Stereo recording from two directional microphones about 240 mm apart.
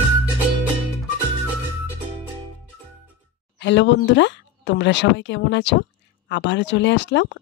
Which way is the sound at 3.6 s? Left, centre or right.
Left.